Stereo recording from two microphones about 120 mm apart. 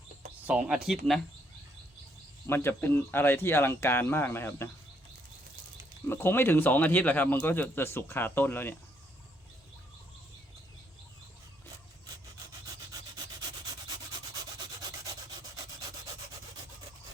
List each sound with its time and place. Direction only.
0.4 s speech: 5° right (ahead or behind)
2.5 s speech: 20° left (ahead or behind)
6.1 s speech: 20° left (ahead or behind)